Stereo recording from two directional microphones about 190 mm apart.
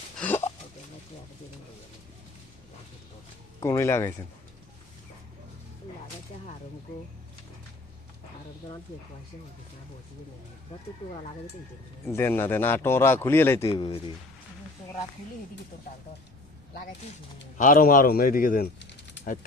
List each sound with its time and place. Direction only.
0.2 s a sound: 10° left (ahead or behind)
3.6 s speech: 15° left (ahead or behind)
12.0 s speech: 10° left (ahead or behind)
13.7 s speech: 30° left (ahead or behind)
17.6 s speech: 45° left (ahead or behind)